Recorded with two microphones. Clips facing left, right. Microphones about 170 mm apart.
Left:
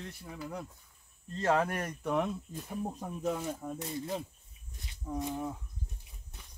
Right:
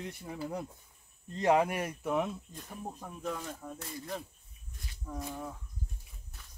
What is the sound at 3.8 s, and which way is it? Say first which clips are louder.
Speech: left 3 dB; 25° left (ahead or behind).